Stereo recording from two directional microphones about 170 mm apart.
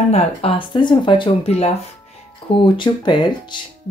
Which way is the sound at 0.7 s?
25° left (ahead or behind).